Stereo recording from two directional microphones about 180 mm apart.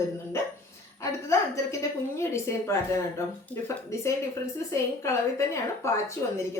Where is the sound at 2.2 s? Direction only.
15° left (ahead or behind).